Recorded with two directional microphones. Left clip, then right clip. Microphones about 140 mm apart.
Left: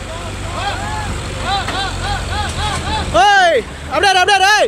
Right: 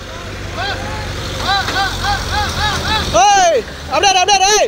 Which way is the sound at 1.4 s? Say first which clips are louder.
Right 3 dB; 25° right (ahead or behind).